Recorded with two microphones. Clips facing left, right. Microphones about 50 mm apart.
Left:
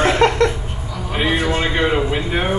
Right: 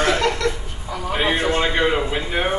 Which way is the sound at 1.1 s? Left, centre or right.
Centre.